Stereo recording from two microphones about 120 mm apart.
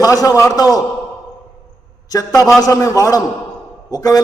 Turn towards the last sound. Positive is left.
turn(degrees=30)  # may be behind; listen again after turning